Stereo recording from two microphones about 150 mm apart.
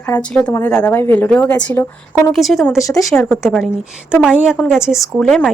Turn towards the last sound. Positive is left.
turn(degrees=5)  # may be behind; listen again after turning